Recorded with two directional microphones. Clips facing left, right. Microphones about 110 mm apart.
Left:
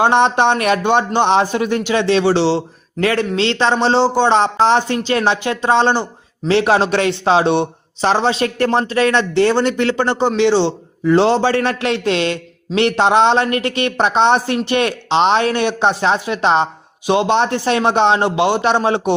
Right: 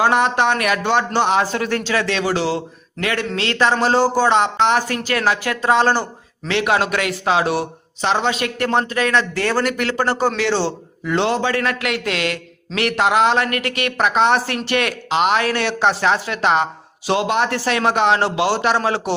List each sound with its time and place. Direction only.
0.0 s a man's voice: 25° left (ahead or behind)
6.5 s a man's voice: 30° left (ahead or behind)
11.0 s a man's voice: 30° left (ahead or behind)